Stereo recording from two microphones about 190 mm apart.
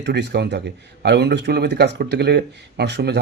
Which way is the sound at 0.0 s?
60° right (ahead or behind).